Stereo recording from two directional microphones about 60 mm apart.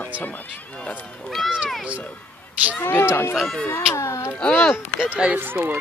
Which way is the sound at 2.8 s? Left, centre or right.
Left.